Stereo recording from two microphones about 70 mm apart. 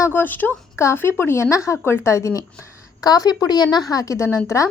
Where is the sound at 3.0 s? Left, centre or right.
Left.